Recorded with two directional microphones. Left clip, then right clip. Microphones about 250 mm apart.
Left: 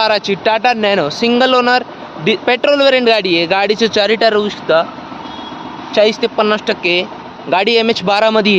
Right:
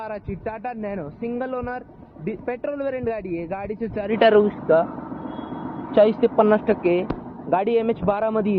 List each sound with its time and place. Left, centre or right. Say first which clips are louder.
0.0 s speech: left 18 dB; left
5.9 s speech: left 5 dB; left